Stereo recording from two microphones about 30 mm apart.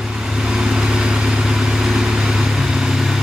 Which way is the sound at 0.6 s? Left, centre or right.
Right.